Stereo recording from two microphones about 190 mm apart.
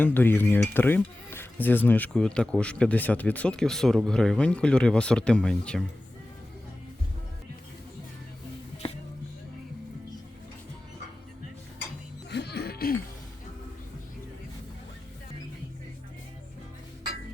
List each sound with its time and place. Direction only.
0.0 s cutlery: 10° left (ahead or behind)
12.3 s music: 60° left (ahead or behind)